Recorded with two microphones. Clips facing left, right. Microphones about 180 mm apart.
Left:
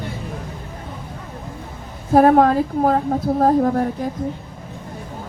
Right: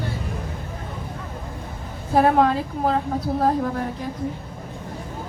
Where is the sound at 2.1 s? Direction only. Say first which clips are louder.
Left 5 dB; 45° left (ahead or behind).